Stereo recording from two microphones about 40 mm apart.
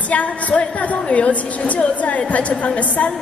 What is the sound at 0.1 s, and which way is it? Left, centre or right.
Speech, left.